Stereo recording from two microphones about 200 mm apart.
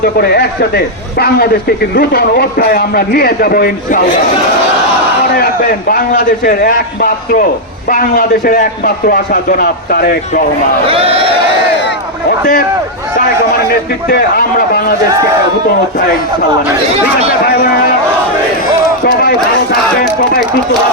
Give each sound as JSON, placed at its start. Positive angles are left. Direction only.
{"t": 0.2, "sound": "a man's voice", "side_deg": 50}
{"t": 2.0, "sound": "a man's voice", "side_deg": 50}
{"t": 5.9, "sound": "a man's voice", "side_deg": 50}
{"t": 10.8, "sound": "a man's voice", "side_deg": -30}
{"t": 14.1, "sound": "a man's voice", "side_deg": 50}
{"t": 17.4, "sound": "a sound", "side_deg": 50}
{"t": 19.0, "sound": "a sound", "side_deg": 50}